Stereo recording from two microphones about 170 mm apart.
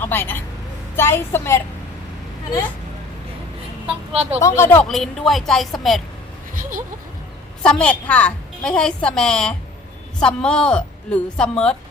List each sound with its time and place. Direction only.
0.0 s a woman's voice: 10° left (ahead or behind)
3.8 s a woman's voice: 35° right (ahead or behind)
4.4 s a woman's voice: 15° left (ahead or behind)
4.9 s a woman's voice: centre (ahead or behind)
6.5 s a sound: 50° right (ahead or behind)
7.6 s a woman's voice: 5° left (ahead or behind)